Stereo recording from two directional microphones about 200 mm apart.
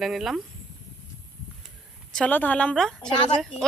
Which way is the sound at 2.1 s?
5° left (ahead or behind).